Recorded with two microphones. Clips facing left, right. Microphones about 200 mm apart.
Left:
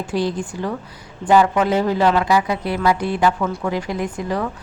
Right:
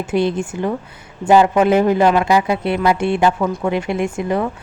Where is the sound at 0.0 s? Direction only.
25° right (ahead or behind).